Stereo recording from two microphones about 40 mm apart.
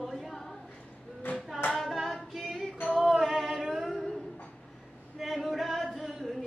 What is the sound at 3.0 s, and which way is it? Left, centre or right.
Music, centre.